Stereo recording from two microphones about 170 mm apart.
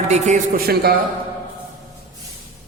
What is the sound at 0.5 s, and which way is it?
Speech, 65° right (ahead or behind).